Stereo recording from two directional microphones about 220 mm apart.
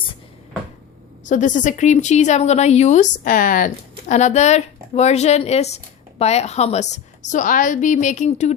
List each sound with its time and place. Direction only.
1.2 s speech: 35° left (ahead or behind)